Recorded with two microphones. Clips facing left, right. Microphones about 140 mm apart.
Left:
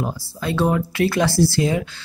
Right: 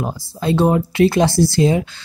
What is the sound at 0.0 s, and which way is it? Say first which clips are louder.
Speech: right 3 dB; 20° right (ahead or behind).